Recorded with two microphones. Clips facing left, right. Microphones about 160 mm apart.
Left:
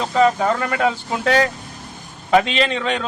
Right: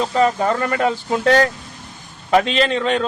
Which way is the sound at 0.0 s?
Centre (ahead or behind).